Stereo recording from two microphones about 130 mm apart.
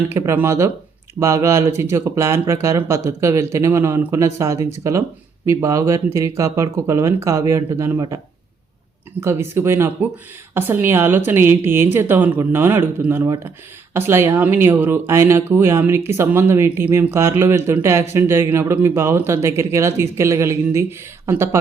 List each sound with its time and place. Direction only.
0.1 s speech: 20° right (ahead or behind)
9.2 s speech: 20° right (ahead or behind)